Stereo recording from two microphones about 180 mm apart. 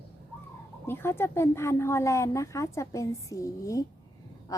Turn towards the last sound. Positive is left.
turn(degrees=20)  # may be behind; listen again after turning